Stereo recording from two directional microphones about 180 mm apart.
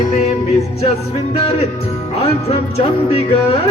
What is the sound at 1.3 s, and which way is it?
Speech, 35° left (ahead or behind).